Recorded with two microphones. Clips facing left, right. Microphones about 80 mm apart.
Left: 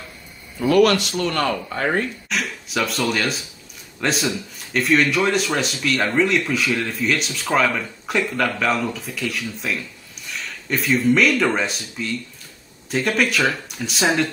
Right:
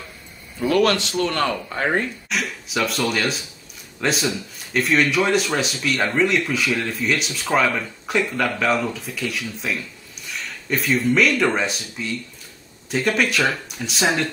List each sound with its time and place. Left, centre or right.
0.8 s speech: right
2.2 s speech: centre